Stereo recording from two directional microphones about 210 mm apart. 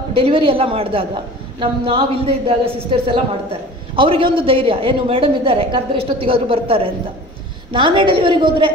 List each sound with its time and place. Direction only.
0.2 s a woman's voice: 25° right (ahead or behind)